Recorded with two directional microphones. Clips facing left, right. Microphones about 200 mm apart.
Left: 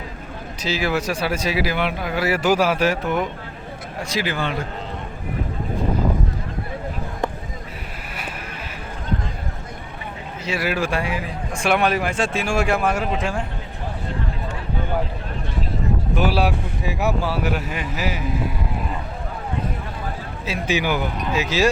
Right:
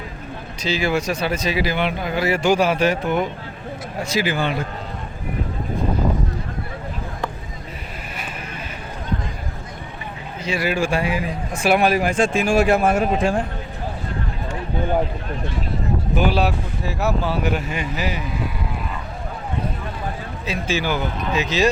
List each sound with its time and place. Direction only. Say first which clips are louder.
0.6 s speech: right 1 dB; 5° left (ahead or behind)
10.4 s speech: right 2 dB; 5° left (ahead or behind); by 13.4 s 35° right (ahead or behind)
16.1 s speech: right 1 dB; 5° left (ahead or behind)
20.7 s speech: left 1 dB; 15° left (ahead or behind)